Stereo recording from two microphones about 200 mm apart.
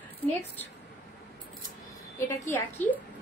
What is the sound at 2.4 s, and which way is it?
Speech, 10° left (ahead or behind).